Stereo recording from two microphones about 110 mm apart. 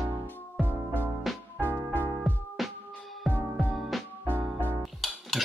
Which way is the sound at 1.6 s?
20° right (ahead or behind).